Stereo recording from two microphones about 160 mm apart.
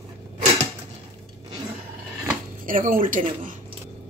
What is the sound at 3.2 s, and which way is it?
Speech, 45° right (ahead or behind).